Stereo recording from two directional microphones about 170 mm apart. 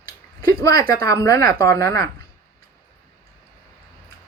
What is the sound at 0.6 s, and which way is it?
A woman's voice, 20° left (ahead or behind).